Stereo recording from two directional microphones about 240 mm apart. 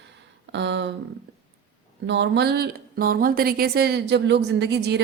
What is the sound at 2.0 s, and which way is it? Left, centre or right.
Speech, right.